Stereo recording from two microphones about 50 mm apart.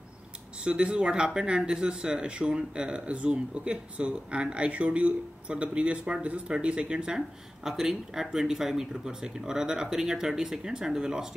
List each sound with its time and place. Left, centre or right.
0.6 s speech: right